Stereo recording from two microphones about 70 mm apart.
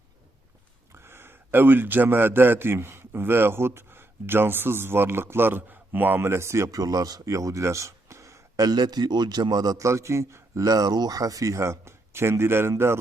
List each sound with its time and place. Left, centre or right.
0.9 s a man's voice: right
6.7 s speech: right
8.6 s a man's voice: right
9.7 s speech: right